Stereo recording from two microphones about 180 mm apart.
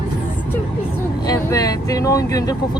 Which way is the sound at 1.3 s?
20° left (ahead or behind).